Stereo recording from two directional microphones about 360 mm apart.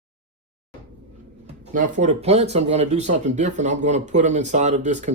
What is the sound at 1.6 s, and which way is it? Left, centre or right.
Speech, centre.